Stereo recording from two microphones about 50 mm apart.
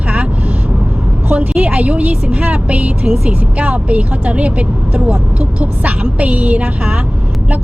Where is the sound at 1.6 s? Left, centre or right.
Right.